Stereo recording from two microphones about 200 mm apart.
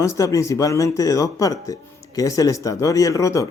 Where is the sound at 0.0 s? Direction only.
15° left (ahead or behind).